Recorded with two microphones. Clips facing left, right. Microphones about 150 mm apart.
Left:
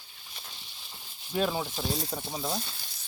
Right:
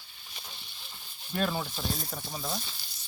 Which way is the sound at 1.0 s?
15° left (ahead or behind).